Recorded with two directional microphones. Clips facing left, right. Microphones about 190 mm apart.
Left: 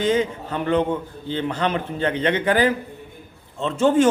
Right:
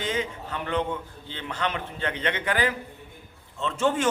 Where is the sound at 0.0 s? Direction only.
35° left (ahead or behind).